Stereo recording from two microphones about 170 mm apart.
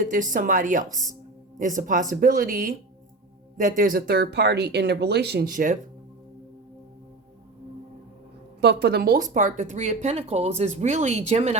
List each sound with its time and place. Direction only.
0.0 s speech: 50° right (ahead or behind)
8.6 s speech: 80° right
9.1 s speech: 50° right (ahead or behind)